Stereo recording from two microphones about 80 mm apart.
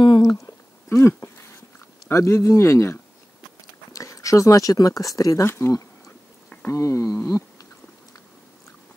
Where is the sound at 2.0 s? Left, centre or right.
Left.